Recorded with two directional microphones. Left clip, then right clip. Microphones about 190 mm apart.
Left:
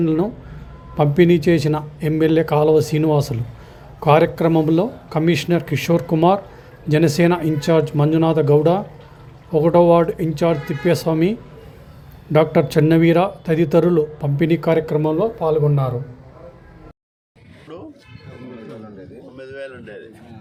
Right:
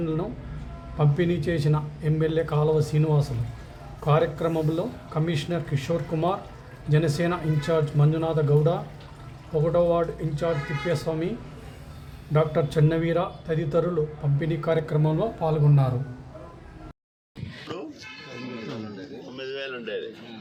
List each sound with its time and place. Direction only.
0.0 s a man's voice: 40° left (ahead or behind)
12.3 s a man's voice: 45° left (ahead or behind)
15.4 s speech: 15° left (ahead or behind)
19.4 s a sound: 25° left (ahead or behind)